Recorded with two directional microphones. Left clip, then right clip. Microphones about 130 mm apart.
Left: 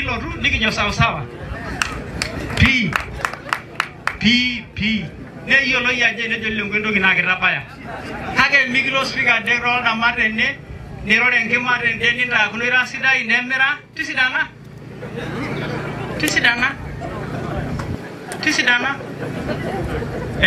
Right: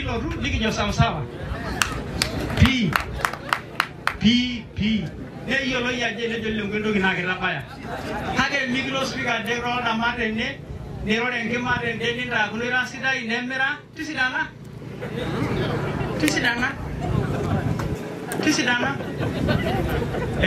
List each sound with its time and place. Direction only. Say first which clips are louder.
0.0 s a man's voice: left 7 dB; 25° left (ahead or behind)
1.7 s a sound: left 1 dB; 15° right (ahead or behind)
4.2 s a man's voice: left 7 dB; 25° left (ahead or behind)
16.2 s a man's voice: left 6 dB; 25° left (ahead or behind)
18.4 s a man's voice: left 5 dB; 25° left (ahead or behind)